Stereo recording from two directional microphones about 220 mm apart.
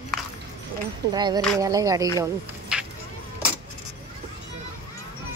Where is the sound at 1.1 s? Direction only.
20° right (ahead or behind).